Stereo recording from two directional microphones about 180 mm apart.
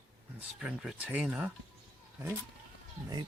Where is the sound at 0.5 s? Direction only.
Centre (ahead or behind).